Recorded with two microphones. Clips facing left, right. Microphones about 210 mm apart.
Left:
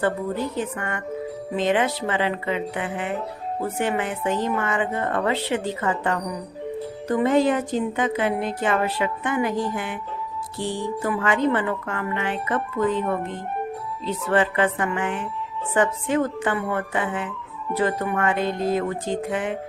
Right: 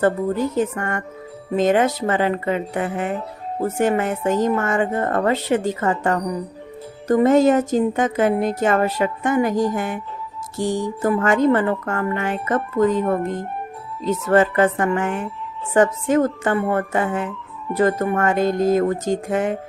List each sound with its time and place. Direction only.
0.5 s a woman's voice: 45° right (ahead or behind)